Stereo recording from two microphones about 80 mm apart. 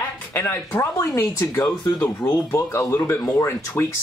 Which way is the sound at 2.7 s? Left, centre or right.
Left.